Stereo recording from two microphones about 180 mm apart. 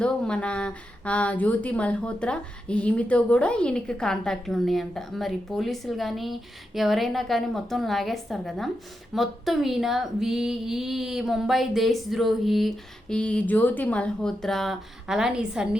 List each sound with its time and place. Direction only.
0.0 s speech: 5° left (ahead or behind)